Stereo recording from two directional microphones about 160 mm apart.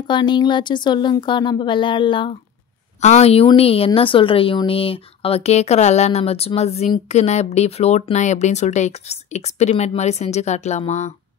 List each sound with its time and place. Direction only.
0.1 s speech: 30° left (ahead or behind)
3.0 s a woman's voice: 45° left (ahead or behind)